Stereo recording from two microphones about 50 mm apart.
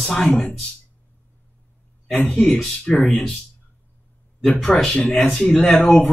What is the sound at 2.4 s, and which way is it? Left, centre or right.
Speech, centre.